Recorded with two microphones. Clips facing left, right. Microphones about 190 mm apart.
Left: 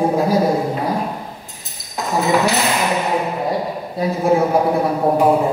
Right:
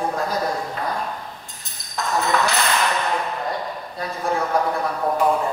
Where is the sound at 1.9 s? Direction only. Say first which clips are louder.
Left 5 dB; 10° left (ahead or behind).